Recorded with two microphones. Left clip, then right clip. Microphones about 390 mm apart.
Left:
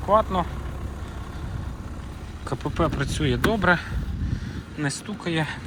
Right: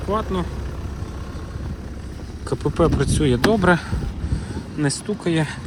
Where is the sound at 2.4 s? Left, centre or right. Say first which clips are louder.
Right 6 dB; centre.